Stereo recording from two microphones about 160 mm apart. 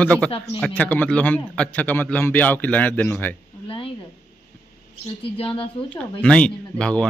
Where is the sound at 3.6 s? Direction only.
35° left (ahead or behind).